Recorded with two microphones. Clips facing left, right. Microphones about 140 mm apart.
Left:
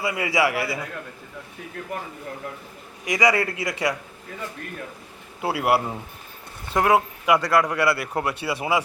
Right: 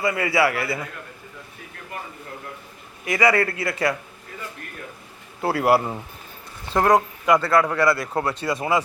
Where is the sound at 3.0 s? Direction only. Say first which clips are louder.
Right 1 dB; 15° left (ahead or behind).